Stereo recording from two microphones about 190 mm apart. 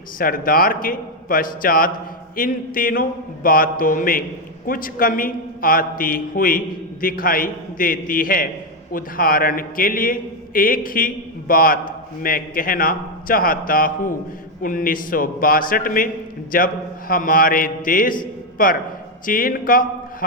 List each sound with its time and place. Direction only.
0.2 s a man's voice: 50° left (ahead or behind)